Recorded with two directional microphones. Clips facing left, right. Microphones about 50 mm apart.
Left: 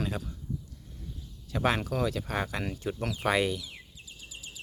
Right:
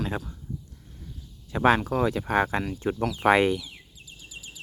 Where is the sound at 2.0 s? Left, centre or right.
Right.